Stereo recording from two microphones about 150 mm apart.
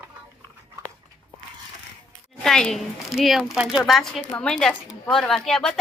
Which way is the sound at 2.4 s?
5° left (ahead or behind).